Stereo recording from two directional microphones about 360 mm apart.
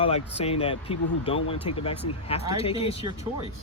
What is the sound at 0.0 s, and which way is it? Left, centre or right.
Speech, centre.